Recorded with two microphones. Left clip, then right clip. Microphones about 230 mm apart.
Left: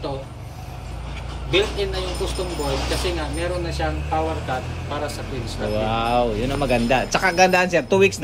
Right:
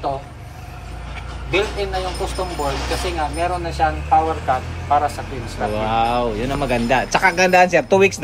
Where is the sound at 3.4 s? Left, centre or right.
Centre.